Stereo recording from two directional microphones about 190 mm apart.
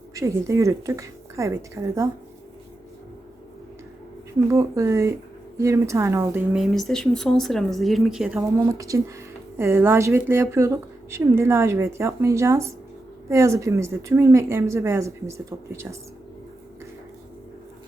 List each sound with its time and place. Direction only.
0.1 s speech: 15° right (ahead or behind)
4.5 s speech: 15° right (ahead or behind)
6.6 s speech: centre (ahead or behind)
8.4 s speech: 15° right (ahead or behind)